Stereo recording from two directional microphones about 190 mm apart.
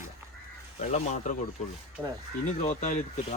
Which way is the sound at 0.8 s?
35° left (ahead or behind).